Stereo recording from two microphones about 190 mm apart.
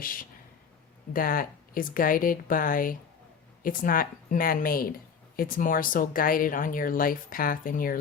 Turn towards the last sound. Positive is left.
turn(degrees=45)  # may be behind; listen again after turning